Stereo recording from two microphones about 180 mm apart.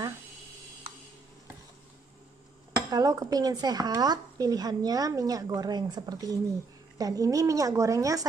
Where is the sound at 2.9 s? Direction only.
20° right (ahead or behind).